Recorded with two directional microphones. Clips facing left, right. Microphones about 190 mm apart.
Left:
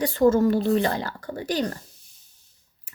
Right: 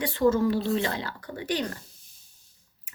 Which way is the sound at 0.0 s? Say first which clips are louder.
Left 4 dB; 45° left (ahead or behind).